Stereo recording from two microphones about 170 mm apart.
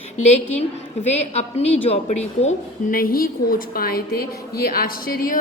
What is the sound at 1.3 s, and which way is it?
A woman's voice, 40° left (ahead or behind).